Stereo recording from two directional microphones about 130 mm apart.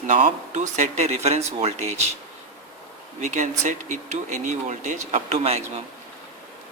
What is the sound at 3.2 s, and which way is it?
Speech, 70° right (ahead or behind).